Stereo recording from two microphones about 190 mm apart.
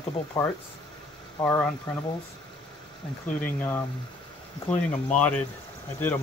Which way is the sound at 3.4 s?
10° left (ahead or behind).